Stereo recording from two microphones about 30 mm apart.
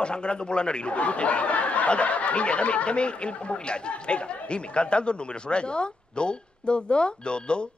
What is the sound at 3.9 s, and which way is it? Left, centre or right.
Speech, left.